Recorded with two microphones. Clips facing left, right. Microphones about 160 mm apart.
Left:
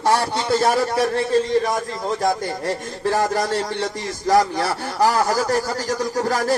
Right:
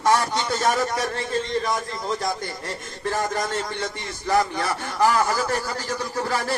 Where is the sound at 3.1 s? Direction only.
35° left (ahead or behind).